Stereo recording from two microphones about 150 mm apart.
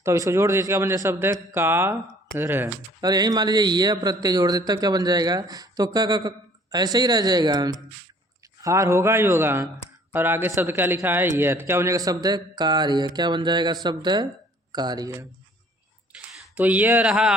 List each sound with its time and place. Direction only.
0.0 s a man's voice: 20° right (ahead or behind)
16.1 s a sound: 5° right (ahead or behind)
16.6 s a man's voice: 10° right (ahead or behind)